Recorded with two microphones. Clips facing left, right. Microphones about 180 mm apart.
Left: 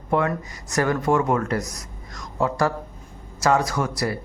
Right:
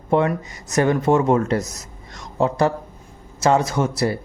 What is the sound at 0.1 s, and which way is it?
A man's voice, 25° right (ahead or behind).